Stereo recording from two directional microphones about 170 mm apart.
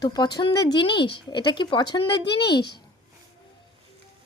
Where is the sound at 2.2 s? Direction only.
75° left (ahead or behind).